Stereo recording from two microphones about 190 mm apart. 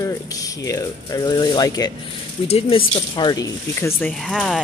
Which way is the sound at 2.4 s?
30° left (ahead or behind).